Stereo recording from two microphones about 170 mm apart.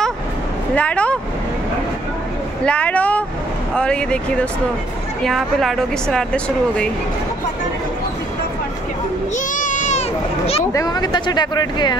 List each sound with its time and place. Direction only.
0.7 s speech: 5° left (ahead or behind)
2.6 s a woman's voice: 5° left (ahead or behind)
9.5 s children playing: 50° left (ahead or behind)
10.6 s speech: 20° left (ahead or behind)